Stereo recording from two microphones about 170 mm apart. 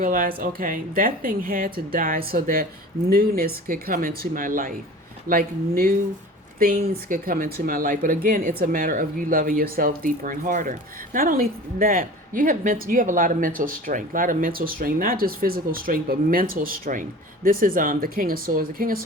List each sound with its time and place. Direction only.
0.0 s speech: 55° right (ahead or behind)